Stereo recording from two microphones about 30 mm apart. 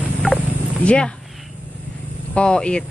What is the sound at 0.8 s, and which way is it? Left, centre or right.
Speech, left.